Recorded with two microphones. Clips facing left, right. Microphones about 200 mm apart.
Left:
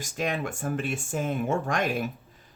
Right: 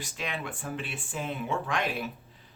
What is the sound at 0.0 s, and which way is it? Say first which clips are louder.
Speech: left 6 dB; 45° left (ahead or behind).